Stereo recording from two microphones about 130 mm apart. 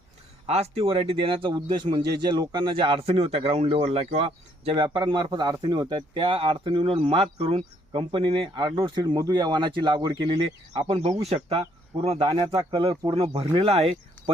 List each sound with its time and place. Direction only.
0.4 s a man's voice: 55° right (ahead or behind)
12.9 s a man's voice: 30° right (ahead or behind)
13.1 s speech: 45° right (ahead or behind)